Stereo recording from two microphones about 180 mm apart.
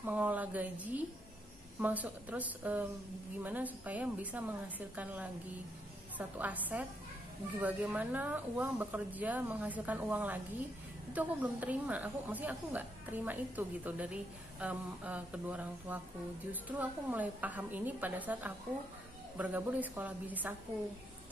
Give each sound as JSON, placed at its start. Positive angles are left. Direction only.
{"t": 0.0, "sound": "a woman's voice", "side_deg": -10}